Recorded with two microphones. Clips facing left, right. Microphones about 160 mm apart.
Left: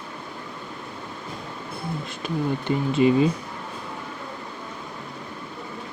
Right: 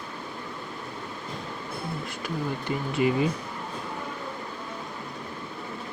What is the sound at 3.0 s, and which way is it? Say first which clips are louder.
Speech: left 5 dB; 25° left (ahead or behind).